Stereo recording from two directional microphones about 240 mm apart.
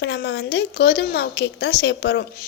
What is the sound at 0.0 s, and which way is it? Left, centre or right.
A woman's voice, left.